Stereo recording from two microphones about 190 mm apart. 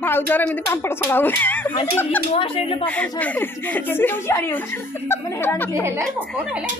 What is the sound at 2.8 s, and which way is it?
A woman's voice, 5° left (ahead or behind).